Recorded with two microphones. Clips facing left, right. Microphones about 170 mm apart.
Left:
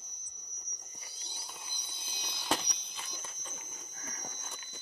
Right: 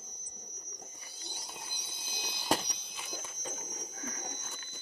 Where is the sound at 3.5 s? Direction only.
40° right (ahead or behind).